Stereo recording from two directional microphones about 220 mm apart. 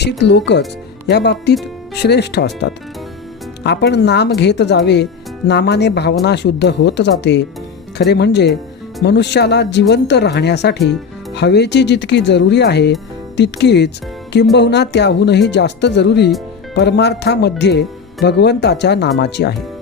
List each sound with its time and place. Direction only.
0.0 s speech: 50° left (ahead or behind)